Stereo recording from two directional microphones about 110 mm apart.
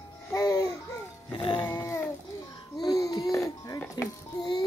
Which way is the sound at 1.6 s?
25° left (ahead or behind).